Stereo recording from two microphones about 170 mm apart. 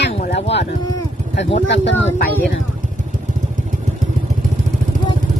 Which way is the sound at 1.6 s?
90° left.